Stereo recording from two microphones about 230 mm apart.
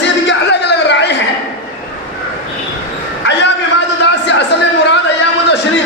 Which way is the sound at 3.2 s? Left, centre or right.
Left.